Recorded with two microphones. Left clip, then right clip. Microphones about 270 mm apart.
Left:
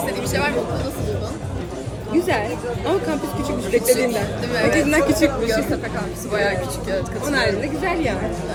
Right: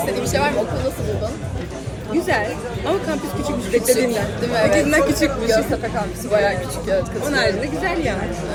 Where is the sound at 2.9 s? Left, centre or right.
Centre.